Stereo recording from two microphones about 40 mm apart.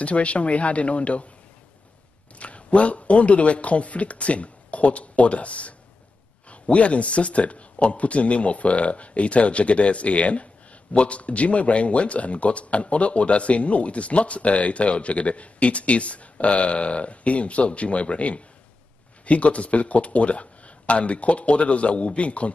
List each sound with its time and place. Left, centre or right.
0.0 s speech: left
2.3 s speech: left